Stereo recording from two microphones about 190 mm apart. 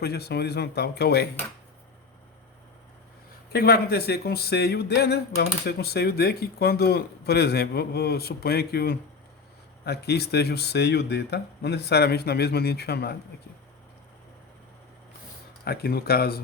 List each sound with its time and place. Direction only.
0.0 s speech: 55° left (ahead or behind)
3.5 s speech: 55° left (ahead or behind)
15.6 s speech: 55° left (ahead or behind)